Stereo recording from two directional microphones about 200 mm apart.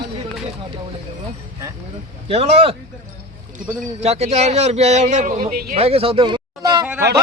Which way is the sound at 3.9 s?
30° right (ahead or behind).